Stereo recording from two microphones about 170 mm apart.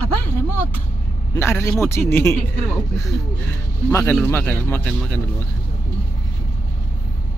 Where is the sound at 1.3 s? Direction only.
15° left (ahead or behind).